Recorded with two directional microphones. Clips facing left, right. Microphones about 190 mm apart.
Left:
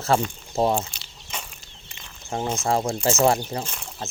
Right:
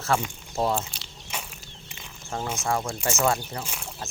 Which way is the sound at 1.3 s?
10° right (ahead or behind).